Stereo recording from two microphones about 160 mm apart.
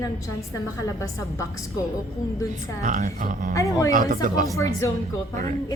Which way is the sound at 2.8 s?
55° right (ahead or behind).